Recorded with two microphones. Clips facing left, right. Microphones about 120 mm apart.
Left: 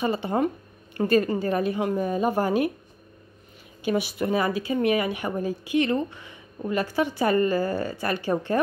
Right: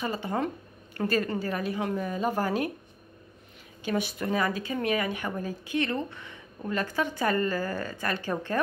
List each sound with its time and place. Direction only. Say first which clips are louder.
0.0 s a woman's voice: left 6 dB; 20° left (ahead or behind)
3.8 s speech: left 4 dB; 10° left (ahead or behind)